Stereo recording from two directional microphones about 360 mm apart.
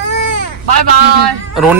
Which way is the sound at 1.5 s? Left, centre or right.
Centre.